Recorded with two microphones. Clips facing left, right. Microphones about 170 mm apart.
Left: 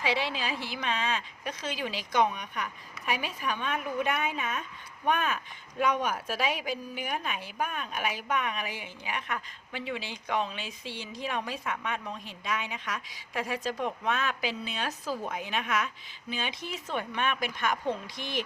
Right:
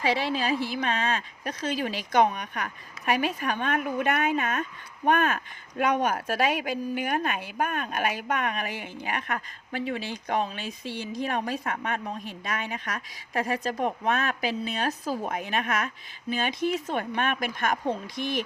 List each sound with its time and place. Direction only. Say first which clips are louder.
0.0 s speech: right 4 dB; 45° right (ahead or behind)